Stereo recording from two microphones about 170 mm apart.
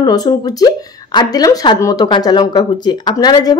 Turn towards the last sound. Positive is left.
turn(degrees=25)  # may be behind; listen again after turning